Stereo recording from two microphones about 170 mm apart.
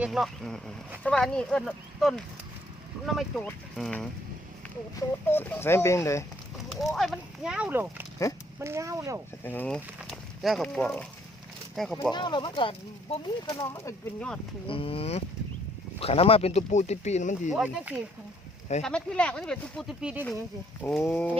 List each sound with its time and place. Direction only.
0.0 s speech: centre (ahead or behind)
4.9 s speech: 10° left (ahead or behind)
6.8 s speech: centre (ahead or behind); by 9.2 s 20° right (ahead or behind)
9.4 s speech: 10° left (ahead or behind)
12.1 s speech: 25° left (ahead or behind)
13.7 s speech: 15° left (ahead or behind)
14.7 s speech: 35° left (ahead or behind)
17.5 s speech: 5° right (ahead or behind)
18.8 s speech: 5° left (ahead or behind)
21.0 s speech: 10° left (ahead or behind)